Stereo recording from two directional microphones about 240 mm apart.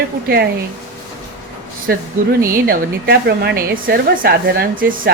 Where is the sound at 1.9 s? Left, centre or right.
Right.